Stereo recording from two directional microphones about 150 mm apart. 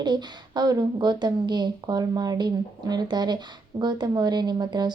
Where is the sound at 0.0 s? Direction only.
30° right (ahead or behind).